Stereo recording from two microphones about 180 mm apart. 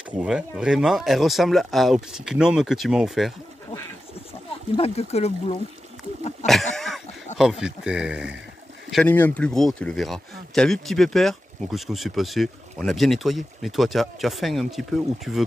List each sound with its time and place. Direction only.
0.2 s speech: 5° right (ahead or behind)
4.7 s speech: 35° left (ahead or behind)
6.4 s a sound: centre (ahead or behind)
7.3 s speech: 5° right (ahead or behind)
8.9 s speech: 10° left (ahead or behind)